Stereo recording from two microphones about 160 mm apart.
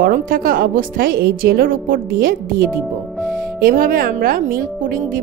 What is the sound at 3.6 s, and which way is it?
A woman's voice, 60° right (ahead or behind).